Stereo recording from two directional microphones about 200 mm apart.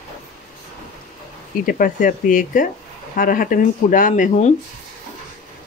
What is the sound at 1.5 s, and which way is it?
Speech, 45° left (ahead or behind).